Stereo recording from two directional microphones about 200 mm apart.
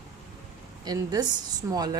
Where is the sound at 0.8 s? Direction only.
20° right (ahead or behind).